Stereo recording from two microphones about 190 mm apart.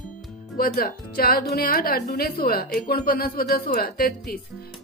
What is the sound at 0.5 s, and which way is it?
A woman's voice, 50° left (ahead or behind).